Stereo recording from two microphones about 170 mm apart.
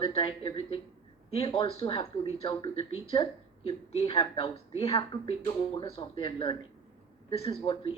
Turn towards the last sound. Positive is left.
turn(degrees=30)  # may be behind; listen again after turning